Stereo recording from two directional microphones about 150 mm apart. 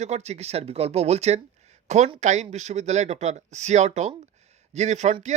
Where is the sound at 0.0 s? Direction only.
50° right (ahead or behind).